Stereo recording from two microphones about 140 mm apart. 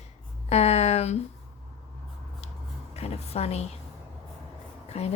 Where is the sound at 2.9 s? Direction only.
50° left (ahead or behind).